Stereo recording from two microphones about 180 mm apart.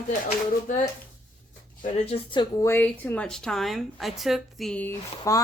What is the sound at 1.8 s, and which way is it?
Speech, 35° left (ahead or behind).